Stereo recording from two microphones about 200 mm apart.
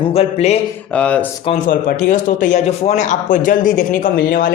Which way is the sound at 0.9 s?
5° left (ahead or behind).